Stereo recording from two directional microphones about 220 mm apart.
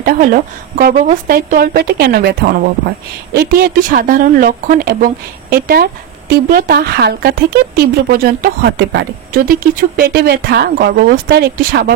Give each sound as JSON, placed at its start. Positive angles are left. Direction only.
{"t": 0.0, "sound": "speech", "side_deg": -40}